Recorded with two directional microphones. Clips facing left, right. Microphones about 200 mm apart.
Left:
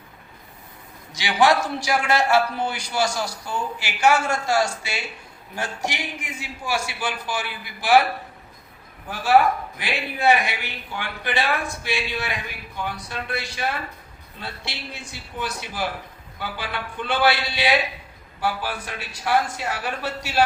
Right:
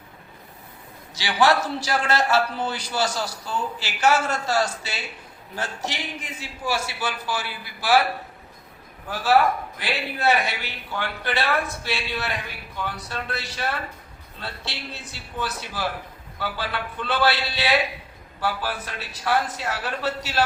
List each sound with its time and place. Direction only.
1.1 s a man's voice: 15° left (ahead or behind)
9.0 s a man's voice: 15° left (ahead or behind)